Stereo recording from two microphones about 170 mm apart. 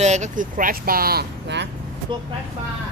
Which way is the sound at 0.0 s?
45° right (ahead or behind).